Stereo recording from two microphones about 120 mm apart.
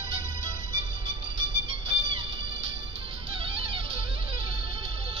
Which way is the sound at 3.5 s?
50° right (ahead or behind).